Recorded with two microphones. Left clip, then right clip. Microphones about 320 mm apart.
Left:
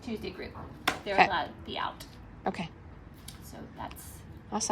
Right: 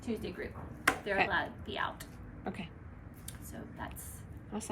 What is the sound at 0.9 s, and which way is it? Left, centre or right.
A woman's voice, centre.